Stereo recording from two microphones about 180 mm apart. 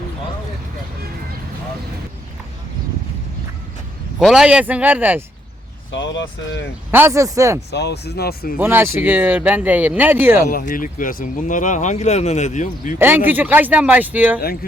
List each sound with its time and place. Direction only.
4.2 s speech: centre (ahead or behind)
5.9 s speech: 90° left
6.9 s speech: 15° right (ahead or behind)
7.7 s speech: 65° left (ahead or behind)
8.5 s speech: 10° right (ahead or behind)
10.5 s speech: 50° left (ahead or behind)
13.0 s speech: 10° right (ahead or behind)